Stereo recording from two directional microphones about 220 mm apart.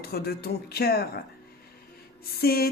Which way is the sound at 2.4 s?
45° left (ahead or behind).